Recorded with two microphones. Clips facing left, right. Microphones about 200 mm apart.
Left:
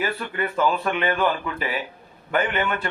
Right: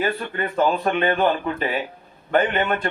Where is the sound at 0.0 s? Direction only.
35° right (ahead or behind).